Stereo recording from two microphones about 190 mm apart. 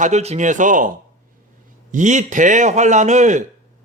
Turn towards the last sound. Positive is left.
turn(degrees=-40)  # may be behind; listen again after turning